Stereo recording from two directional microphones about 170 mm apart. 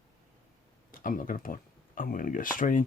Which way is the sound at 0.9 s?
55° left (ahead or behind).